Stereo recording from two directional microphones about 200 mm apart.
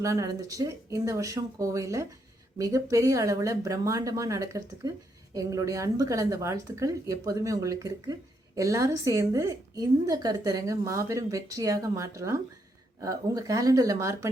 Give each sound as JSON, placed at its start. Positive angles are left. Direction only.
{"t": 0.0, "sound": "a woman's voice", "side_deg": -15}